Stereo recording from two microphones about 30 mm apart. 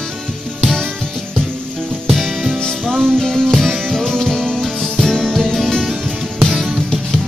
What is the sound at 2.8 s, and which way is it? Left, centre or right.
Music, centre.